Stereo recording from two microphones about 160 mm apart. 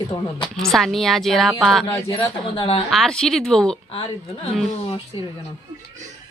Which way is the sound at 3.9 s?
30° left (ahead or behind).